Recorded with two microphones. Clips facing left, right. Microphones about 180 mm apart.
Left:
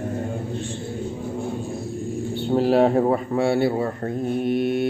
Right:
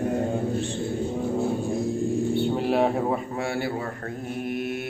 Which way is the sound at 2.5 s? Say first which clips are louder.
Left 5 dB; 35° left (ahead or behind).